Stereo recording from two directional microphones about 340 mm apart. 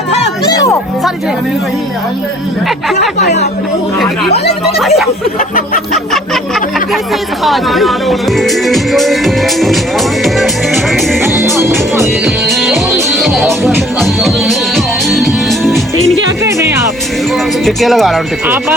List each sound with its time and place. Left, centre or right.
0.4 s music: centre
4.8 s speech: centre
5.4 s a sound: left
6.3 s speech: centre
10.9 s music: centre
17.3 s speech: centre